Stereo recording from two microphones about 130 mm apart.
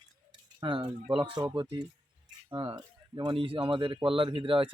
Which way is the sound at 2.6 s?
40° right (ahead or behind).